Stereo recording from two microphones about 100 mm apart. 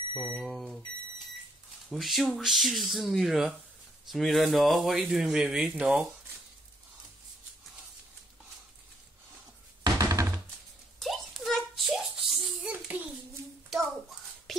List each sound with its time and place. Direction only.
0.4 s speech: centre (ahead or behind)
1.9 s speech: centre (ahead or behind)
9.8 s music: 35° right (ahead or behind)
11.0 s a sound: centre (ahead or behind)